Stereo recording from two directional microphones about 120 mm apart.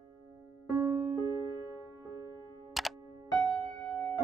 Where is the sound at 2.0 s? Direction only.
30° right (ahead or behind).